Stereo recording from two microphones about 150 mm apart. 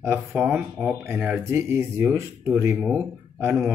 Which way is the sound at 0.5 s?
15° right (ahead or behind).